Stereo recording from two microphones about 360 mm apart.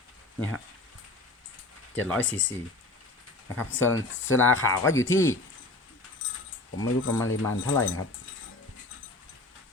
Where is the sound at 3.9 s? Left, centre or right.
Left.